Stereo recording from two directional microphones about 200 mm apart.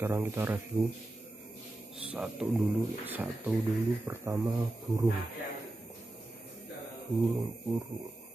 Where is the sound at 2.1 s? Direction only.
5° right (ahead or behind).